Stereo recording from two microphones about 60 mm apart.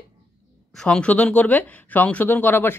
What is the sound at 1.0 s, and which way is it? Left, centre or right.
Speech, left.